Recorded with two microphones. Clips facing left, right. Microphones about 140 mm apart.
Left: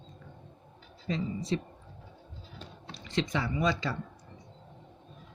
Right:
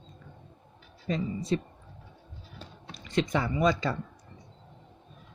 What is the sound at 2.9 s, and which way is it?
Speech, 50° right (ahead or behind).